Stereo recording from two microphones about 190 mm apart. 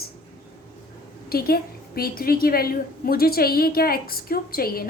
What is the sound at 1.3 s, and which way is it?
A woman's voice, 55° left (ahead or behind).